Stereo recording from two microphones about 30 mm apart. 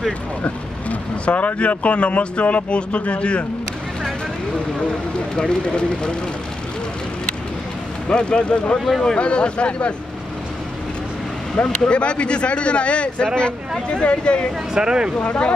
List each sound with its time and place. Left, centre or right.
0.4 s speech: left
5.3 s speech: left
8.1 s speech: left
11.6 s speech: left
11.9 s speech: left
14.7 s speech: right
15.1 s speech: left